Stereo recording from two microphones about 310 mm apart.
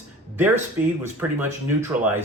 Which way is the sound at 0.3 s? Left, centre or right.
Centre.